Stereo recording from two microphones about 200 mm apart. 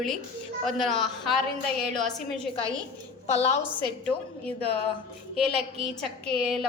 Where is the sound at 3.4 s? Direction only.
30° left (ahead or behind).